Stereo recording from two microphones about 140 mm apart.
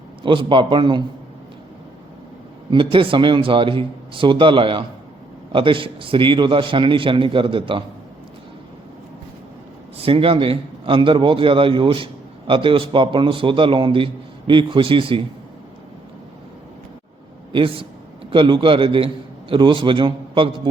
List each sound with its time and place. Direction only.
0.2 s a man's voice: 35° right (ahead or behind)
2.6 s a man's voice: 35° right (ahead or behind)
10.0 s a man's voice: 40° right (ahead or behind)
17.5 s a man's voice: 40° right (ahead or behind)